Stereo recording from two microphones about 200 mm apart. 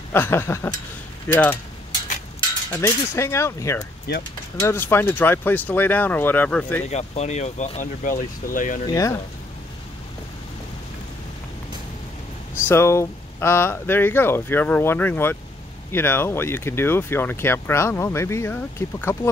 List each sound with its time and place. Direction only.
0.1 s speech: 10° left (ahead or behind)
2.7 s speech: 15° left (ahead or behind)
4.1 s speech: 55° left (ahead or behind)
4.6 s speech: 15° left (ahead or behind)
6.9 s speech: 35° left (ahead or behind)
8.8 s speech: 15° left (ahead or behind)
12.6 s speech: 10° left (ahead or behind)